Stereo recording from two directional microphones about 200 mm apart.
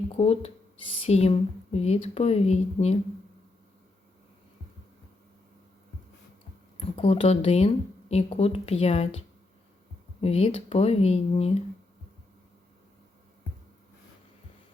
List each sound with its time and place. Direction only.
0.1 s speech: 30° left (ahead or behind)
6.7 s speech: 30° left (ahead or behind)